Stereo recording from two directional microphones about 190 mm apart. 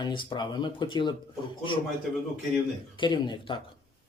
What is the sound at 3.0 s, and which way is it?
Speech, 25° left (ahead or behind).